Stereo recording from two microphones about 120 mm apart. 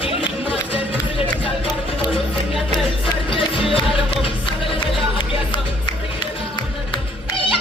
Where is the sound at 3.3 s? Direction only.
45° left (ahead or behind).